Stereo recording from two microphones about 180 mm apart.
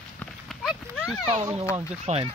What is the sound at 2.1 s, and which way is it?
Speech, 40° right (ahead or behind).